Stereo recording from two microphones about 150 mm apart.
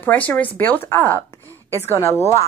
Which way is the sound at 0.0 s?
10° left (ahead or behind).